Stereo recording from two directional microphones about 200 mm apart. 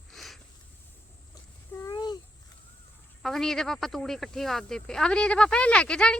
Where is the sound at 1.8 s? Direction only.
20° left (ahead or behind).